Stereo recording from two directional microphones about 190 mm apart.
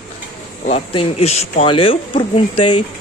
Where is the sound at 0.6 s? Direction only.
35° left (ahead or behind).